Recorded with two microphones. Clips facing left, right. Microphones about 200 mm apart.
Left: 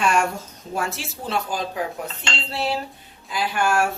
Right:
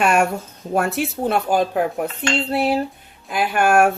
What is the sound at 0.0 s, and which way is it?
A woman's voice, 60° right (ahead or behind).